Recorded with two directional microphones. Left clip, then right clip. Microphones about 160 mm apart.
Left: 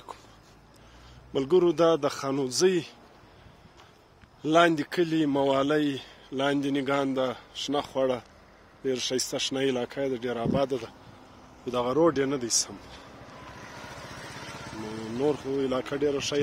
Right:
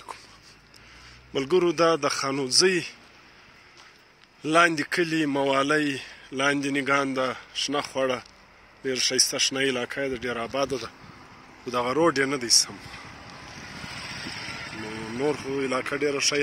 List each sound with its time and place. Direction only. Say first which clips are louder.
1.3 s a man's voice: even; 5° left (ahead or behind)
4.4 s a man's voice: right 1 dB; 10° left (ahead or behind)
13.7 s vehicle: right 6 dB; 40° left (ahead or behind)
14.3 s music: right 5 dB; 85° left
15.1 s a man's voice: even; 5° left (ahead or behind)